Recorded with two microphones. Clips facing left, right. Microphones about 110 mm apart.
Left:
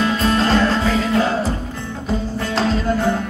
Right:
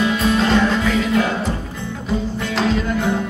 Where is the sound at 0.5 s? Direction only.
35° left (ahead or behind).